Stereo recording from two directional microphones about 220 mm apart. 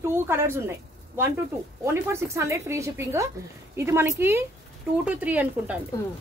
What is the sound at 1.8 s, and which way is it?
A woman's voice, 15° right (ahead or behind).